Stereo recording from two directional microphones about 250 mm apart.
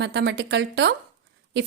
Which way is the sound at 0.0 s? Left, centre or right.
Right.